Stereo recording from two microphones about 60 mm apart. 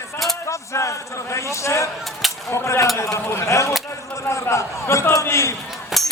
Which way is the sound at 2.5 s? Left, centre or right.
Left.